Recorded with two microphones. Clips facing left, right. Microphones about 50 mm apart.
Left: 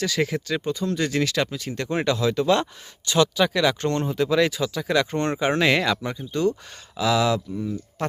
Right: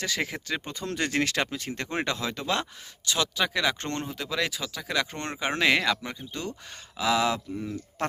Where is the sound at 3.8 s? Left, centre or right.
Right.